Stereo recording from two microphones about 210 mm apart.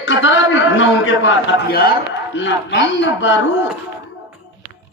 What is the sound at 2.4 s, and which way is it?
A man's voice, 60° left (ahead or behind).